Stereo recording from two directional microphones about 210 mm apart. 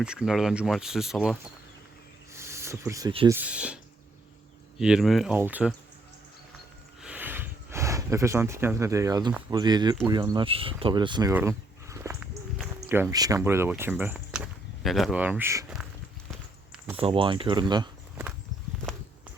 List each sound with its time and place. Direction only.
0.0 s speech: 5° right (ahead or behind)
2.3 s a sound: 15° right (ahead or behind)
3.2 s speech: 10° right (ahead or behind)
4.8 s speech: 5° right (ahead or behind)
7.0 s a sound: 5° right (ahead or behind)
9.5 s speech: 20° right (ahead or behind)
16.3 s walk: 5° right (ahead or behind)
17.0 s speech: 25° right (ahead or behind)
18.9 s a sound: 5° left (ahead or behind)